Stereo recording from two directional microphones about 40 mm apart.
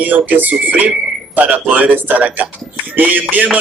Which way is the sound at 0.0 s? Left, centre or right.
Right.